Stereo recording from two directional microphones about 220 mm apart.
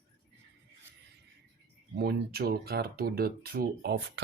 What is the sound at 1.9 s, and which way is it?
Speech, 45° right (ahead or behind).